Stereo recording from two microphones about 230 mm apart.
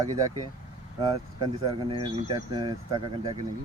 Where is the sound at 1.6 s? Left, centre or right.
Right.